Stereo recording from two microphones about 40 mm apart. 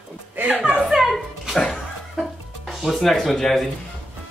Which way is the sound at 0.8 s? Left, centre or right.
Centre.